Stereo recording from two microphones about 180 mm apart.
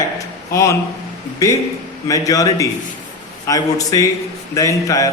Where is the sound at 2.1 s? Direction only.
20° left (ahead or behind).